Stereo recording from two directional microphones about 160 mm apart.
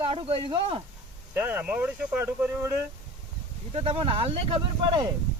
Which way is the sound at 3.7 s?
35° right (ahead or behind).